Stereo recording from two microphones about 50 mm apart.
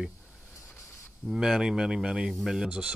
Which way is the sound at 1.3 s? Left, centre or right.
Centre.